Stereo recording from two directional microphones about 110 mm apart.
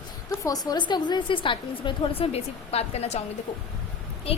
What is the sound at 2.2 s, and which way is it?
A woman's voice, 70° left (ahead or behind).